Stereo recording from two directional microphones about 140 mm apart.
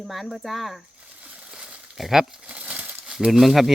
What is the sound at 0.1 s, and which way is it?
Speech, centre (ahead or behind).